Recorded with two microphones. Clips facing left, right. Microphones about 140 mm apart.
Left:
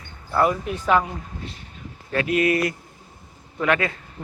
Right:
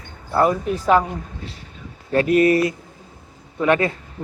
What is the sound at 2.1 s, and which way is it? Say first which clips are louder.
Speech: right 5 dB; 35° right (ahead or behind).